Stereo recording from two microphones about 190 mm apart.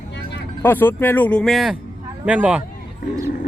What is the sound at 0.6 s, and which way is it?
Speech, 10° left (ahead or behind).